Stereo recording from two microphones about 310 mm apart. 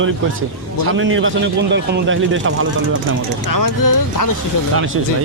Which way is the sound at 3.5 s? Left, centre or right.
Left.